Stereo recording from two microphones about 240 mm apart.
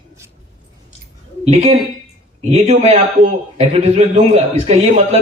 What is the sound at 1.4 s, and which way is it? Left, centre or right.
A man's voice, right.